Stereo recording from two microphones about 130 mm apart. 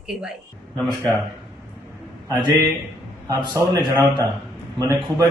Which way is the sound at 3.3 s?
25° right (ahead or behind).